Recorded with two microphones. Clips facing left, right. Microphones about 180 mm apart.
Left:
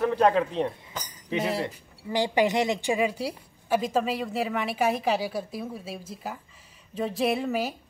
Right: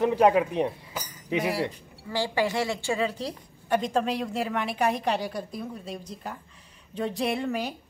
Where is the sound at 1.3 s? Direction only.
25° left (ahead or behind).